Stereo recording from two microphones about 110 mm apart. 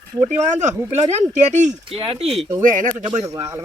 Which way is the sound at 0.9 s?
85° right.